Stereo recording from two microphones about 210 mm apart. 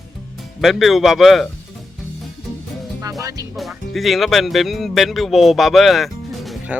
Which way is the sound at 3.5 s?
Centre (ahead or behind).